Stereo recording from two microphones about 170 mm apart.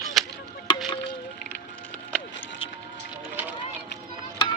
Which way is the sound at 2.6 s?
30° left (ahead or behind).